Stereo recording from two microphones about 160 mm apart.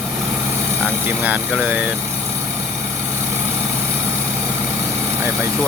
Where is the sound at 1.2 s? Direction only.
10° right (ahead or behind).